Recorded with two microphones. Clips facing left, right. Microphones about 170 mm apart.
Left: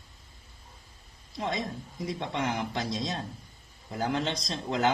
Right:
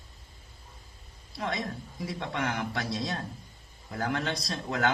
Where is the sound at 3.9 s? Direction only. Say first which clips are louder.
Left 1 dB; 20° left (ahead or behind).